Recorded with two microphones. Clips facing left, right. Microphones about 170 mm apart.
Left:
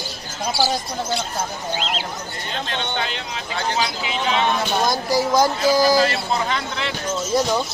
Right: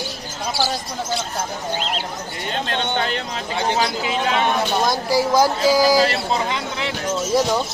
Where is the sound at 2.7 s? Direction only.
50° right (ahead or behind).